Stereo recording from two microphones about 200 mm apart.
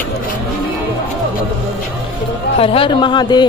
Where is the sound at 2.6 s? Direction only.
25° left (ahead or behind).